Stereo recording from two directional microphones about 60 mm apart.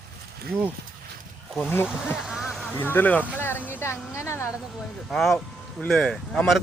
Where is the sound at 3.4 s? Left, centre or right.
Left.